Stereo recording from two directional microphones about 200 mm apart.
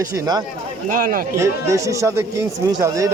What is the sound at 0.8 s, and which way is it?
Speech, 45° right (ahead or behind).